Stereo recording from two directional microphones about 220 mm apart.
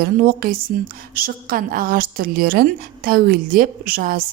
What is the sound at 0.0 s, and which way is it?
A woman's voice, 40° right (ahead or behind).